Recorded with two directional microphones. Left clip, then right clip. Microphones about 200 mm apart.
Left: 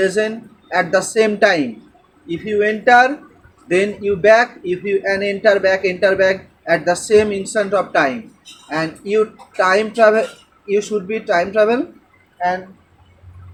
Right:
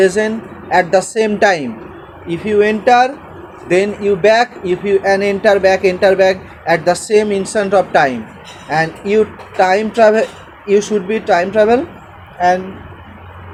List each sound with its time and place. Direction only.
0.0 s speech: 25° right (ahead or behind)